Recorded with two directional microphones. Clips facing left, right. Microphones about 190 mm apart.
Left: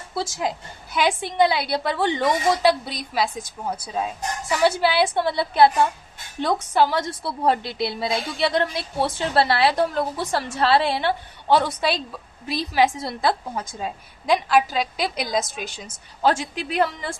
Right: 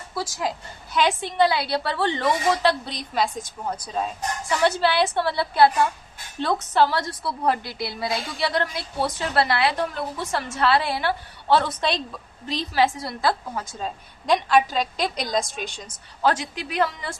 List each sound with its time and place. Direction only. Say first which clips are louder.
0.1 s a woman's voice: left 2 dB; 25° left (ahead or behind); by 16.3 s 5° left (ahead or behind)